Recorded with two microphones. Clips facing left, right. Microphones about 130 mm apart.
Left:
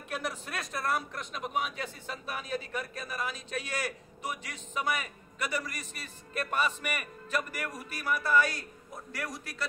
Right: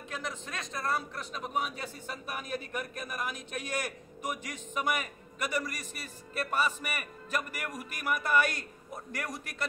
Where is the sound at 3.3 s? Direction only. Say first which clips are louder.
Even; 45° right (ahead or behind).